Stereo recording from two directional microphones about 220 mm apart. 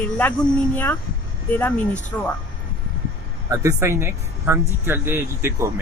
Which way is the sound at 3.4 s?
15° right (ahead or behind).